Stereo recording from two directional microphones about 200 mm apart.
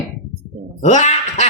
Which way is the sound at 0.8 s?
35° left (ahead or behind).